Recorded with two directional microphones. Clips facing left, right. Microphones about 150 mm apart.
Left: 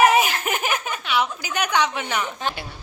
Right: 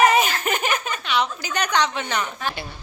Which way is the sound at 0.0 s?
5° left (ahead or behind).